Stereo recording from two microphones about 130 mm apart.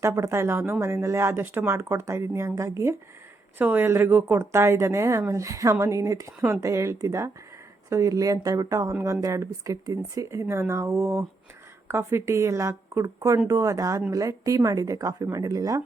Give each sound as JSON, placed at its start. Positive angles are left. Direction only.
{"t": 0.0, "sound": "speech", "side_deg": -20}